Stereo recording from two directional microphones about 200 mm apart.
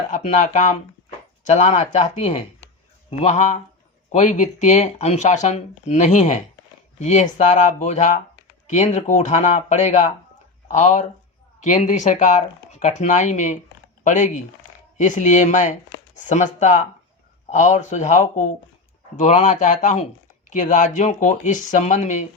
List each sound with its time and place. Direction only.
0.1 s speech: 35° left (ahead or behind)